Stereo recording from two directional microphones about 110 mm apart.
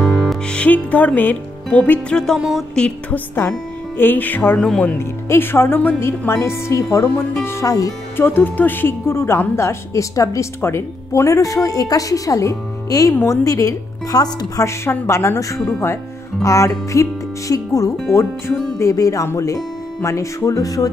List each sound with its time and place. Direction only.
0.0 s music: 5° left (ahead or behind)
2.8 s a woman's voice: 15° left (ahead or behind)
4.9 s a woman's voice: 20° left (ahead or behind)
8.2 s a woman's voice: 20° left (ahead or behind); by 14.7 s 35° left (ahead or behind)
14.7 s a woman's voice: 25° left (ahead or behind)